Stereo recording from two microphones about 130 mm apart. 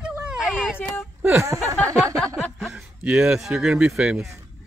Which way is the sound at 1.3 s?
25° right (ahead or behind).